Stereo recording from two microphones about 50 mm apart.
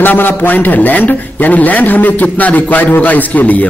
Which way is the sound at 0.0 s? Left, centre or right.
Left.